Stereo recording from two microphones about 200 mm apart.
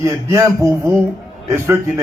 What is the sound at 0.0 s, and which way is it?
A man's voice, 15° right (ahead or behind).